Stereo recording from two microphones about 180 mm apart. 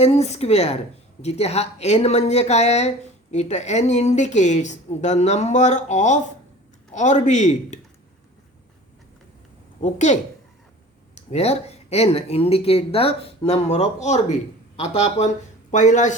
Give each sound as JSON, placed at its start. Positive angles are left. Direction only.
{"t": 0.0, "sound": "speech", "side_deg": 35}
{"t": 9.8, "sound": "speech", "side_deg": 40}